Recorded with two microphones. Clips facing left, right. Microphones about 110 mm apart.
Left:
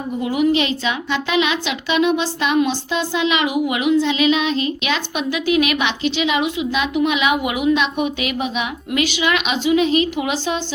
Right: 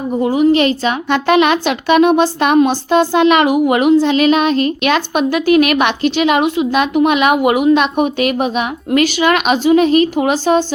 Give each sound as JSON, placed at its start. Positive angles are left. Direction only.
{"t": 0.2, "sound": "a woman's voice", "side_deg": -35}
{"t": 0.6, "sound": "speech", "side_deg": -45}